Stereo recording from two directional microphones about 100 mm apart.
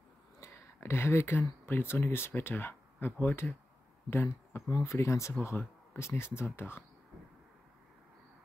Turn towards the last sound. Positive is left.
turn(degrees=25)  # may be behind; listen again after turning